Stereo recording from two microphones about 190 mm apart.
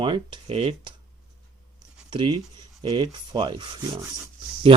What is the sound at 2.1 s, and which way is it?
Speech, 25° right (ahead or behind).